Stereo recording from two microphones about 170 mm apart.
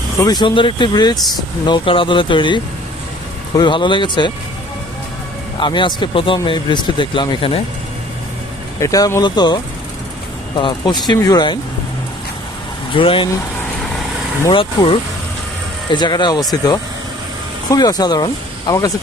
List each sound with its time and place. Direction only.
0.2 s speech: 25° left (ahead or behind)
5.5 s speech: 30° left (ahead or behind)
8.8 s speech: 20° left (ahead or behind)
12.9 s speech: 30° left (ahead or behind)
14.5 s speech: 30° left (ahead or behind)